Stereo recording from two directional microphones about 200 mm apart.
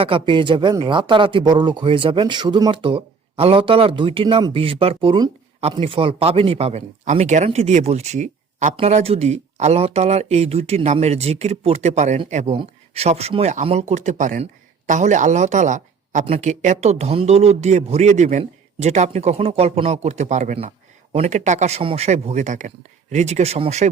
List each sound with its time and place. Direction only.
0.0 s speech: 25° right (ahead or behind)